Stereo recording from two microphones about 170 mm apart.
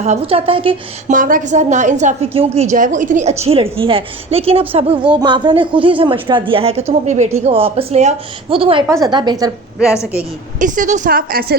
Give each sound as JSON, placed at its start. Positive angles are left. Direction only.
{"t": 0.0, "sound": "speech", "side_deg": -40}
{"t": 1.1, "sound": "a woman's voice", "side_deg": -50}
{"t": 10.6, "sound": "speech", "side_deg": -45}